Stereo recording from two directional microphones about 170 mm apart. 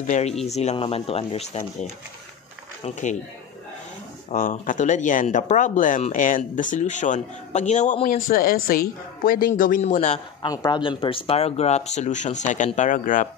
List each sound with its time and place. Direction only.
0.0 s speech: 45° left (ahead or behind)
4.3 s speech: 50° left (ahead or behind)
10.4 s speech: 25° left (ahead or behind); by 13.3 s 50° left (ahead or behind)